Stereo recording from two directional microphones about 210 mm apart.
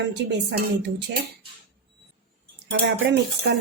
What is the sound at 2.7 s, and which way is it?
Speech, 55° right (ahead or behind).